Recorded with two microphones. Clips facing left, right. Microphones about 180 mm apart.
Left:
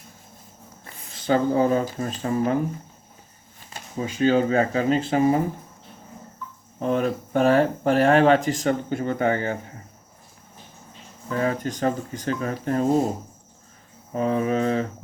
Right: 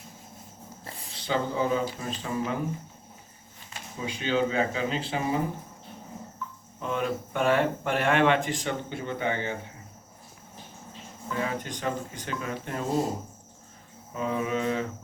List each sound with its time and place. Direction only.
1.1 s speech: 45° left (ahead or behind)
3.7 s speech: 45° left (ahead or behind)
6.7 s speech: 40° left (ahead or behind)
11.3 s speech: 45° left (ahead or behind)
14.1 s speech: 40° left (ahead or behind)